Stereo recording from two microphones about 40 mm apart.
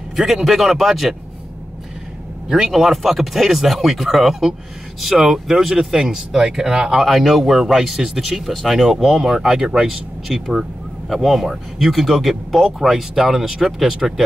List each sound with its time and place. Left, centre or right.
0.1 s speech: centre
2.5 s speech: centre
7.1 s speech: centre
10.2 s speech: centre